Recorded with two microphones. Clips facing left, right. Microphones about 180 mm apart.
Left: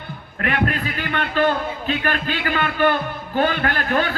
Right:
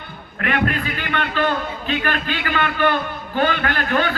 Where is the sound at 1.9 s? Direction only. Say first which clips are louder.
Even; 35° left (ahead or behind).